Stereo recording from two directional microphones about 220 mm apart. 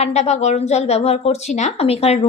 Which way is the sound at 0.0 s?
30° left (ahead or behind).